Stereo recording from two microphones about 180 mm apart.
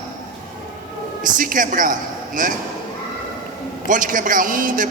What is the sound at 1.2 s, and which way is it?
A man's voice, 50° right (ahead or behind).